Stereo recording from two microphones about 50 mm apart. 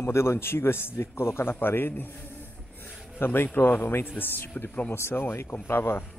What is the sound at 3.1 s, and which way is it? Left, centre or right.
A man's voice, left.